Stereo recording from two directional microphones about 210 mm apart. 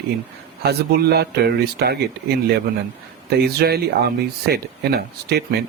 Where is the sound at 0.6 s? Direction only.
50° right (ahead or behind).